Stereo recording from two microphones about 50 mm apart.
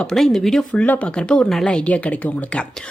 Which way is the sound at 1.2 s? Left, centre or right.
Centre.